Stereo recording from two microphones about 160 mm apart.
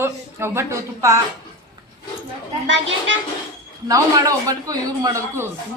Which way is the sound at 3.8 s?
20° right (ahead or behind).